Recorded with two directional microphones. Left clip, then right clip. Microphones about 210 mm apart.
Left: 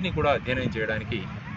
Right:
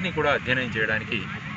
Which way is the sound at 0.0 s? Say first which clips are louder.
Right 1 dB; 25° left (ahead or behind).